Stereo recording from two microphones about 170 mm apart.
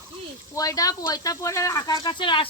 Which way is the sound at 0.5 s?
20° left (ahead or behind).